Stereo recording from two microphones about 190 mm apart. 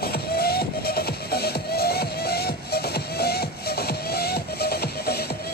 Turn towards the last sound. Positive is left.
turn(degrees=55)  # may be behind; listen again after turning